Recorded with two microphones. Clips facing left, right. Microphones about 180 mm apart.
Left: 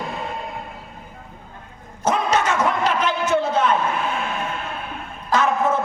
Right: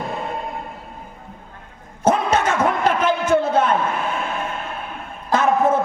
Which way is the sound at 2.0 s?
55° right (ahead or behind).